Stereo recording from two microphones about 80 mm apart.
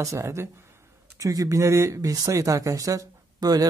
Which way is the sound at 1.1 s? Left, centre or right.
Right.